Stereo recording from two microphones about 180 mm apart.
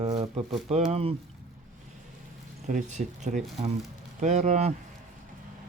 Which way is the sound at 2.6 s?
40° right (ahead or behind).